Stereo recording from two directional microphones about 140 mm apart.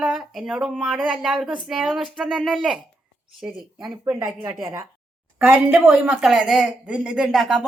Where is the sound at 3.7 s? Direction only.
35° right (ahead or behind).